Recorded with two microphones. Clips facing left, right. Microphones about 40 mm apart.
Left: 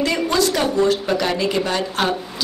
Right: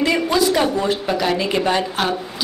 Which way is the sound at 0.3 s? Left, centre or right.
Centre.